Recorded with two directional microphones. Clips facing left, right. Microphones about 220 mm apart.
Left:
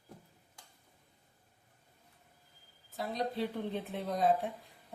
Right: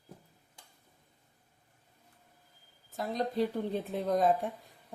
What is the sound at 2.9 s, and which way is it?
A woman's voice, 45° right (ahead or behind).